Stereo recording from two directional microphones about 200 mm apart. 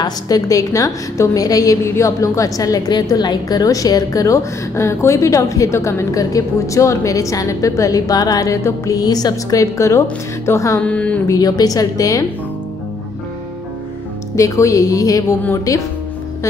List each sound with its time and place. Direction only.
0.0 s a woman's voice: 15° left (ahead or behind)
11.3 s a woman's voice: 20° left (ahead or behind)
14.3 s a woman's voice: 15° left (ahead or behind)